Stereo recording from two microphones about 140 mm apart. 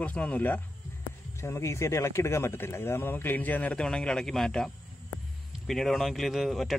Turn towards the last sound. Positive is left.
turn(degrees=0)  # may be behind; listen again after turning